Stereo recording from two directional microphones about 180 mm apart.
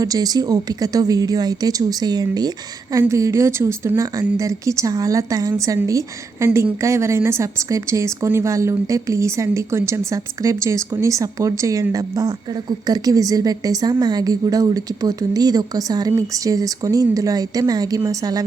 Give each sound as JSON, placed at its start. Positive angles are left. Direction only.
{"t": 0.0, "sound": "a woman's voice", "side_deg": -20}